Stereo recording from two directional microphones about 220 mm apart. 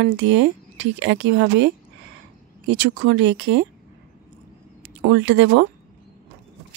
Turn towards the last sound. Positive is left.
turn(degrees=-55)  # may be behind; listen again after turning